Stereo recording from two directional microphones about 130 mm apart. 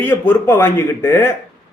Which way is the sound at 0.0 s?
15° left (ahead or behind).